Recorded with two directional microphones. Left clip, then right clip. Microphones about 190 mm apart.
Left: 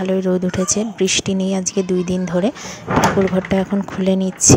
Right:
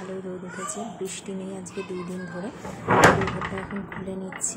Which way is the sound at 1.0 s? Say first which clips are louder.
Left 16 dB; 45° left (ahead or behind).